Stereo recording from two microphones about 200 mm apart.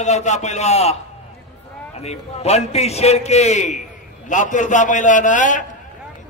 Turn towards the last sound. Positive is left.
turn(degrees=40)  # may be behind; listen again after turning